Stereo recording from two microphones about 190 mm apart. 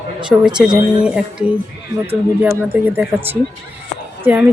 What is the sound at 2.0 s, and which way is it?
Speech, 10° right (ahead or behind).